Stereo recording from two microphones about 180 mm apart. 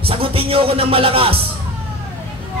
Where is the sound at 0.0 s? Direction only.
30° right (ahead or behind).